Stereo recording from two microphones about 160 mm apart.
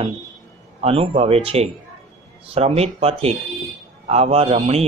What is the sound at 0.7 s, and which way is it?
Speech, 40° right (ahead or behind).